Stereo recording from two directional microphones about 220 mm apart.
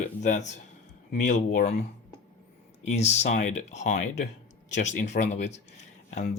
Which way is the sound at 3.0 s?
30° left (ahead or behind).